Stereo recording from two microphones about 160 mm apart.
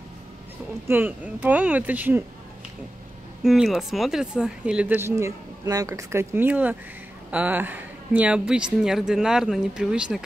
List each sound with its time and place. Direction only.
0.8 s speech: 10° right (ahead or behind)
3.4 s a woman's voice: 5° right (ahead or behind)